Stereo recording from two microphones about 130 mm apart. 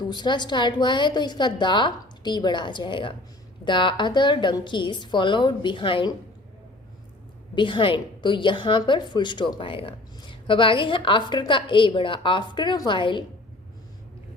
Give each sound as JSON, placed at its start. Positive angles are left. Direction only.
{"t": 0.1, "sound": "a woman's voice", "side_deg": 35}
{"t": 7.5, "sound": "a woman's voice", "side_deg": 40}